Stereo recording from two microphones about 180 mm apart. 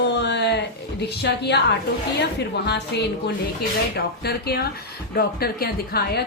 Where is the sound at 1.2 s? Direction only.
65° left (ahead or behind).